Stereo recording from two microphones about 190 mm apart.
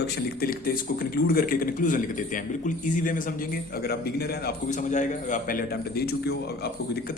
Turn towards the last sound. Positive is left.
turn(degrees=55)  # may be behind; listen again after turning